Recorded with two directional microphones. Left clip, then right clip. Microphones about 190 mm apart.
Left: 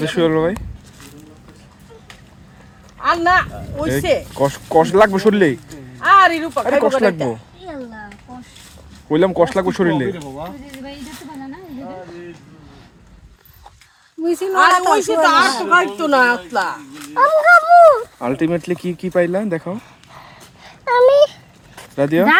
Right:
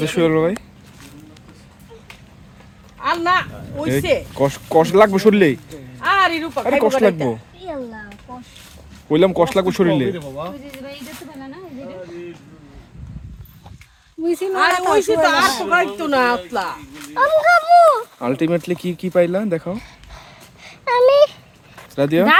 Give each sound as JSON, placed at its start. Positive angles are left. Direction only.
{"t": 0.0, "sound": "speech", "side_deg": -20}
{"t": 3.0, "sound": "speech", "side_deg": 15}
{"t": 4.4, "sound": "speech", "side_deg": -20}
{"t": 6.0, "sound": "speech", "side_deg": 15}
{"t": 6.7, "sound": "speech", "side_deg": -20}
{"t": 9.0, "sound": "speech", "side_deg": -20}
{"t": 14.3, "sound": "speech", "side_deg": 10}
{"t": 17.2, "sound": "speech", "side_deg": 25}
{"t": 18.2, "sound": "speech", "side_deg": -15}
{"t": 20.1, "sound": "a sound", "side_deg": 10}
{"t": 21.9, "sound": "speech", "side_deg": -15}